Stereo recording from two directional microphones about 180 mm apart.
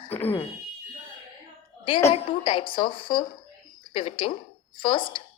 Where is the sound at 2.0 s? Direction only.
30° left (ahead or behind).